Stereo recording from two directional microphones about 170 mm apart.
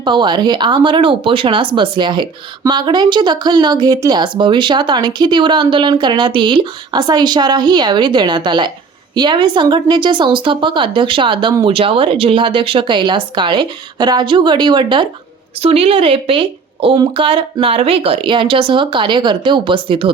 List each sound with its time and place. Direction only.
0.0 s a woman's voice: 25° right (ahead or behind)